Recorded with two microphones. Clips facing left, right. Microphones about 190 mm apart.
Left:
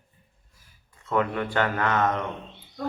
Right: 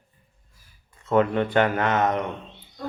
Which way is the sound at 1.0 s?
25° right (ahead or behind).